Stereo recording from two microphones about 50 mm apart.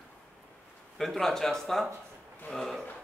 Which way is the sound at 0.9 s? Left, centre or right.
Centre.